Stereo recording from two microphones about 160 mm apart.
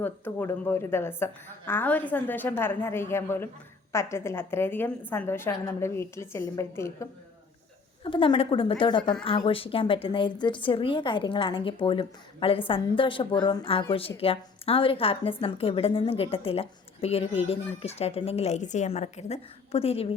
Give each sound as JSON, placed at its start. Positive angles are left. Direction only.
{"t": 0.0, "sound": "a woman's voice", "side_deg": 15}
{"t": 8.0, "sound": "a woman's voice", "side_deg": 30}